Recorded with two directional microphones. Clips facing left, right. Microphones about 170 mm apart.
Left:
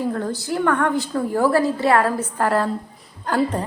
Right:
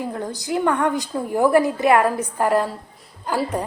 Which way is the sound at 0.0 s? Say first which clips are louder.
Left 4 dB; 15° right (ahead or behind).